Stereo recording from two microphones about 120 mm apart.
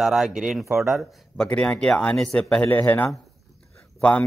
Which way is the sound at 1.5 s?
10° left (ahead or behind).